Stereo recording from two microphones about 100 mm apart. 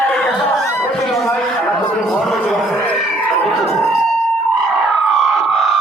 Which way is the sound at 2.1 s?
Centre (ahead or behind).